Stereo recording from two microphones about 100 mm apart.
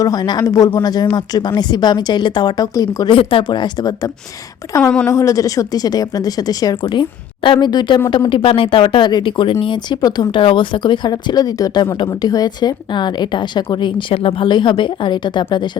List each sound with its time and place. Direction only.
0.0 s speech: 40° left (ahead or behind)
3.1 s a woman's voice: 65° left (ahead or behind); by 8.0 s 50° left (ahead or behind)
8.3 s speech: 60° left (ahead or behind)